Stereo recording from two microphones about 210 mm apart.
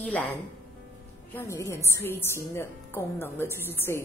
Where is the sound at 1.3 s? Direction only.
15° left (ahead or behind).